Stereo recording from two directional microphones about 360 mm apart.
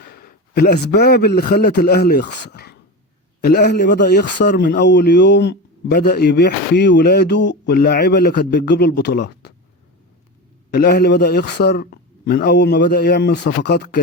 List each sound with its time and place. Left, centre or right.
0.0 s a man's voice: left
10.7 s speech: left